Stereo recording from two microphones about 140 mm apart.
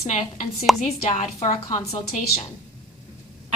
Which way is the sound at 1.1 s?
60° left (ahead or behind).